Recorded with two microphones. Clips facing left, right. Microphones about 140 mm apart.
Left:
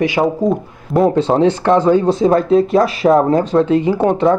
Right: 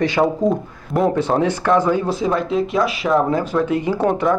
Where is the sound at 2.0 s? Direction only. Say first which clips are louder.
Left 7 dB; 5° right (ahead or behind).